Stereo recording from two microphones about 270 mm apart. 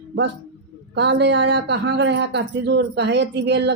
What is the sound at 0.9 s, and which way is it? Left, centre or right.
Speech, right.